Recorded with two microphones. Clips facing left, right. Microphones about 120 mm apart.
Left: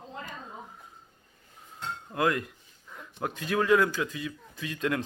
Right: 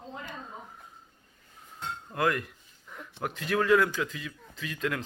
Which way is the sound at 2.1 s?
20° left (ahead or behind).